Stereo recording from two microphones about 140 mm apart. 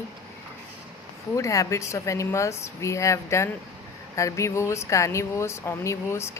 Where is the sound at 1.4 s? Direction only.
20° left (ahead or behind).